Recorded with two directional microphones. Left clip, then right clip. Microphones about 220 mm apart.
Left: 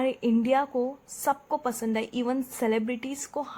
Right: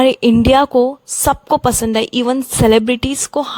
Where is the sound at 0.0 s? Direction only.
45° right (ahead or behind).